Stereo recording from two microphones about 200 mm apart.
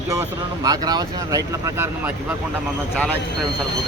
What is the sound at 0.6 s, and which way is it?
Speech, 20° right (ahead or behind).